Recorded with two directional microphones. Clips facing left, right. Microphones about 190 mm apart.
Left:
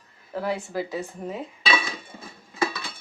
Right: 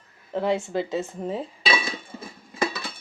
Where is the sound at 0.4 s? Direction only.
25° right (ahead or behind).